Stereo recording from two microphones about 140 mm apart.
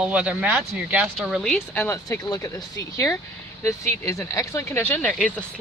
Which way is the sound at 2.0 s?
25° left (ahead or behind).